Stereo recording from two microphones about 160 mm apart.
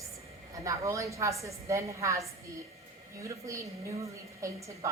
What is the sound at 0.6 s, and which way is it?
A woman's voice, 20° right (ahead or behind).